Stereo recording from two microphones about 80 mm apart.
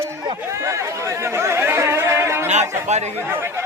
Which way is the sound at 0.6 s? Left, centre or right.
Right.